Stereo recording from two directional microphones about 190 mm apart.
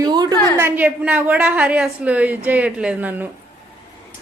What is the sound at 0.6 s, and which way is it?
A woman's voice, 10° right (ahead or behind).